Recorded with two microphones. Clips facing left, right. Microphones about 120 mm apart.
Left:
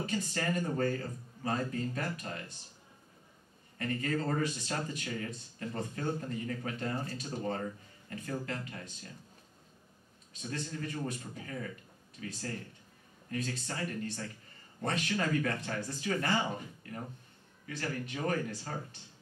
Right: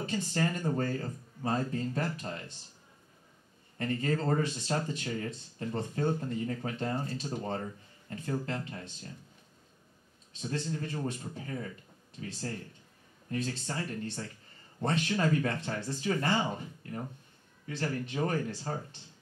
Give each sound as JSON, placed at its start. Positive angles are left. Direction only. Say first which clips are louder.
{"t": 0.0, "sound": "speech", "louder": "right 3 dB", "side_deg": -30}
{"t": 3.7, "sound": "speech", "louder": "right 2 dB", "side_deg": -30}
{"t": 10.3, "sound": "speech", "louder": "right 4 dB", "side_deg": -30}
{"t": 17.6, "sound": "speech", "louder": "right 3 dB", "side_deg": -30}